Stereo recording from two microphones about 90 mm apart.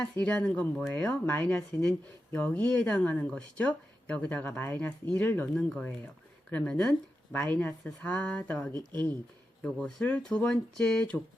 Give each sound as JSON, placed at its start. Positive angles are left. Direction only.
{"t": 0.0, "sound": "speech", "side_deg": 15}
{"t": 9.6, "sound": "speech", "side_deg": 5}